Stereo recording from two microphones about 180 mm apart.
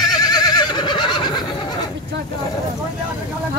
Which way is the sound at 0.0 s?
20° left (ahead or behind).